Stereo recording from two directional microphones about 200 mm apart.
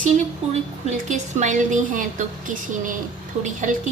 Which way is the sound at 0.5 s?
35° right (ahead or behind).